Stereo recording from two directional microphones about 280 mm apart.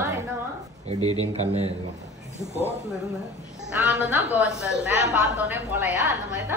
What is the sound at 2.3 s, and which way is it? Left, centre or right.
Speech, right.